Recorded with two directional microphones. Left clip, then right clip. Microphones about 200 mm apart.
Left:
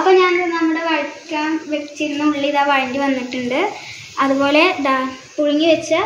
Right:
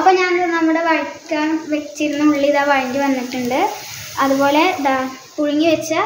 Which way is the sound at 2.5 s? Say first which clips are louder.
Even; 25° right (ahead or behind).